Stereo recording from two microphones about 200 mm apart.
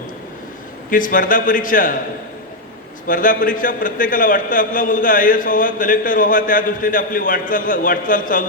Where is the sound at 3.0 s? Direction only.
45° left (ahead or behind).